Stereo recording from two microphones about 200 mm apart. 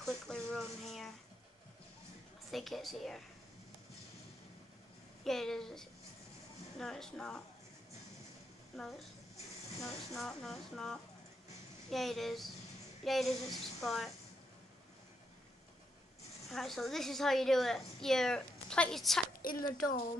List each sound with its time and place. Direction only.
0.0 s a sound: 5° left (ahead or behind)
2.5 s a woman's voice: centre (ahead or behind)
5.2 s a woman's voice: centre (ahead or behind)
8.7 s a woman's voice: centre (ahead or behind)
16.4 s a woman's voice: centre (ahead or behind)
19.4 s speech: 45° left (ahead or behind)